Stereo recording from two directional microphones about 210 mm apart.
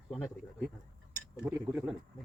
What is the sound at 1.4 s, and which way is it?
Speech, 10° right (ahead or behind).